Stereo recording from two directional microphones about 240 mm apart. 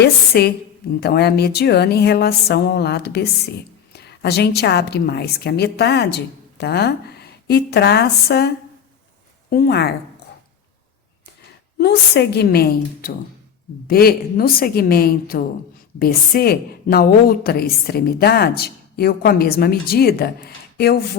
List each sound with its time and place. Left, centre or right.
0.0 s a woman's voice: left
11.8 s a woman's voice: left